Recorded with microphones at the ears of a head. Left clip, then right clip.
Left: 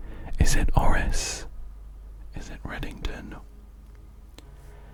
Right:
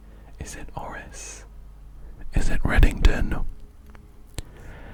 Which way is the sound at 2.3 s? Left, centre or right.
Right.